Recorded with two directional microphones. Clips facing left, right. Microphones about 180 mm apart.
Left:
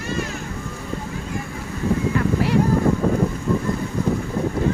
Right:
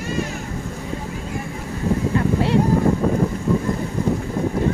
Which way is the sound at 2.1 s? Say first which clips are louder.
Right 1 dB; 25° right (ahead or behind).